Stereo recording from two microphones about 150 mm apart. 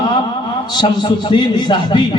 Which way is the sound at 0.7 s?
30° left (ahead or behind).